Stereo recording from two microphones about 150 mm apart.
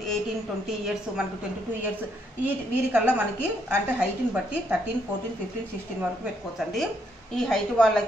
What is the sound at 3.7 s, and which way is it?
Speech, 10° right (ahead or behind).